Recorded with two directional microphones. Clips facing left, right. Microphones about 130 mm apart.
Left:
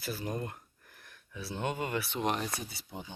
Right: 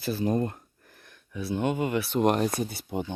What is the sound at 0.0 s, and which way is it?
Speech, 25° right (ahead or behind).